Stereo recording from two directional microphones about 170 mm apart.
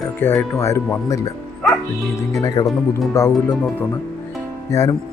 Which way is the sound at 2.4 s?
20° left (ahead or behind).